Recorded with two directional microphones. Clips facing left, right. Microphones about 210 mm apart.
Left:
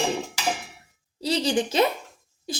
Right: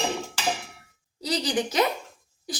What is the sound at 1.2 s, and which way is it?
Speech, 25° left (ahead or behind).